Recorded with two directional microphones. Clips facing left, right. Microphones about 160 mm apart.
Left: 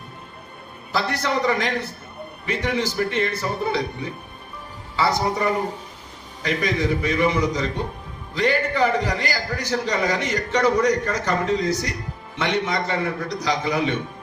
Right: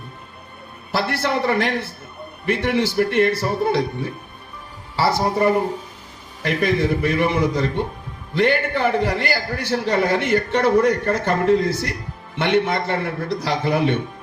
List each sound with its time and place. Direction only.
0.9 s a man's voice: 55° right (ahead or behind)